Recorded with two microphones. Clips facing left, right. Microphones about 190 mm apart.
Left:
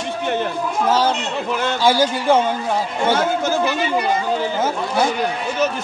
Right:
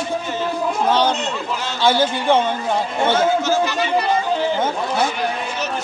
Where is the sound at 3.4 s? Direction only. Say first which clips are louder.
Even; 55° left (ahead or behind).